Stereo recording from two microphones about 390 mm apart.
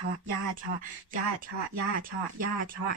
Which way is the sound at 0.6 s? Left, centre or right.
Right.